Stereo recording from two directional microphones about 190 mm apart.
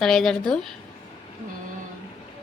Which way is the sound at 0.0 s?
Centre (ahead or behind).